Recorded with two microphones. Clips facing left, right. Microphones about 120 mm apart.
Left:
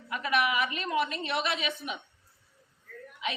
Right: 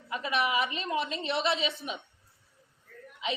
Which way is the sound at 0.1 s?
25° right (ahead or behind).